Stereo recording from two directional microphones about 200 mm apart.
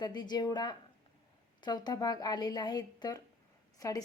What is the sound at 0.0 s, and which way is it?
A woman's voice, 20° left (ahead or behind).